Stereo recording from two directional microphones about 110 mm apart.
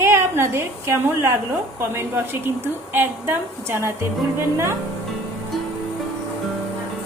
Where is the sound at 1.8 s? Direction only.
20° right (ahead or behind).